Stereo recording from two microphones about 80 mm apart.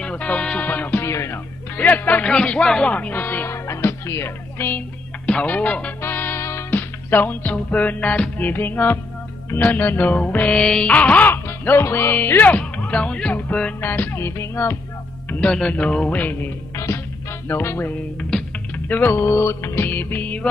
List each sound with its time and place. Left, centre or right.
0.0 s music: centre
1.0 s music: left
1.8 s music: left
2.3 s speech: centre
3.6 s speech: left
5.2 s speech: centre
6.0 s music: left
15.4 s speech: centre
16.2 s music: left
16.7 s music: left